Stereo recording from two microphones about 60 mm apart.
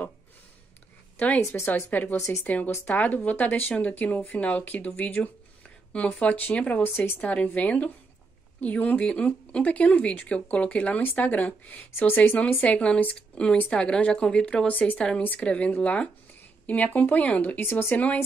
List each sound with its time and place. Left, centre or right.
1.1 s a woman's voice: left
17.6 s speech: left